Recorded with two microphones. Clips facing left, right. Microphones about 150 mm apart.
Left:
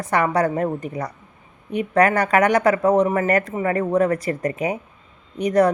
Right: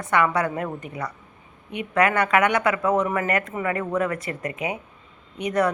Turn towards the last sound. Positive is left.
turn(degrees=35)  # may be behind; listen again after turning